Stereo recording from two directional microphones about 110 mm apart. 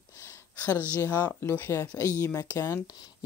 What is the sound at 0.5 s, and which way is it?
Speech, 15° left (ahead or behind).